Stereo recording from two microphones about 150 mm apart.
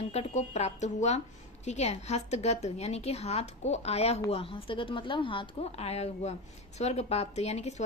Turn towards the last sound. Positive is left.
turn(degrees=50)  # may be behind; listen again after turning